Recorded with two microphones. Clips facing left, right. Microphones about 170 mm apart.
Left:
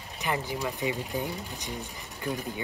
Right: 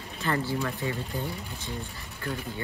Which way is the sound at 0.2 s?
15° left (ahead or behind).